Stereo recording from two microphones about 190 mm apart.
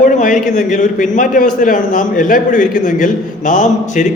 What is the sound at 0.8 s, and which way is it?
A man's voice, 45° left (ahead or behind).